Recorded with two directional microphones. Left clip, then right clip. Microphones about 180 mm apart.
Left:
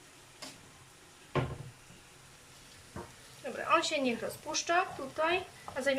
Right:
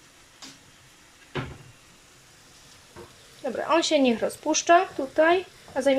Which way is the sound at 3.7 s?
30° right (ahead or behind).